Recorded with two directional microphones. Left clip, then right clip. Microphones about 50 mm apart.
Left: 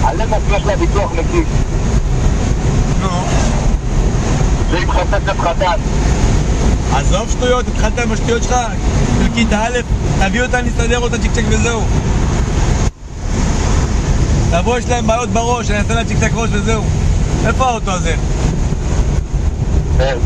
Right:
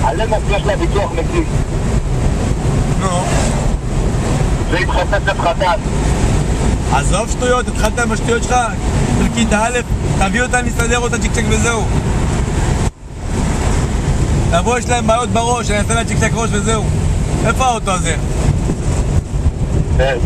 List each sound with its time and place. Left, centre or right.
0.0 s speech: centre
3.2 s boat: centre
4.7 s speech: centre
6.9 s speech: right
11.1 s speech: right
14.7 s speech: right
15.1 s speech: right